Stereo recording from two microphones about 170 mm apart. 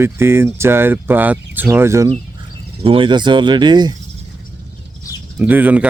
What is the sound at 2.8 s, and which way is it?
Speech, 30° right (ahead or behind).